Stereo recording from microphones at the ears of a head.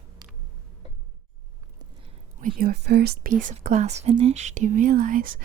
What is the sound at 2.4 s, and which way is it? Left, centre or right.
Speech, right.